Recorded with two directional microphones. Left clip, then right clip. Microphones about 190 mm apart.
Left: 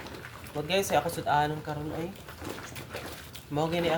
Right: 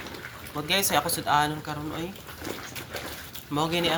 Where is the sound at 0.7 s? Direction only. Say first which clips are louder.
Right 2 dB; 15° left (ahead or behind).